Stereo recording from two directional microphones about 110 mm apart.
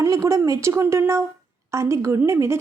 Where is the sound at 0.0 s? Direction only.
30° right (ahead or behind).